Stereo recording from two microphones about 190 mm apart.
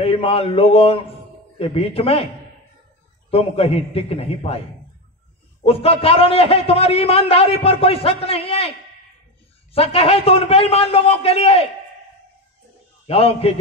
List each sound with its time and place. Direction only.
0.0 s a man's voice: 30° left (ahead or behind)
3.3 s a man's voice: 30° left (ahead or behind)
5.6 s a man's voice: 30° left (ahead or behind)
9.8 s a man's voice: 30° left (ahead or behind)
13.0 s a man's voice: 30° left (ahead or behind)